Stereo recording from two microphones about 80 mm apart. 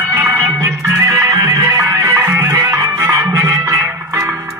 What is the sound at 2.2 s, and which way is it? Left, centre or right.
Music, right.